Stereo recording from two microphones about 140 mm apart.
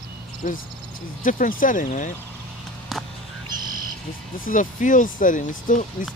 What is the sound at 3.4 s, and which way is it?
Frog, 30° right (ahead or behind).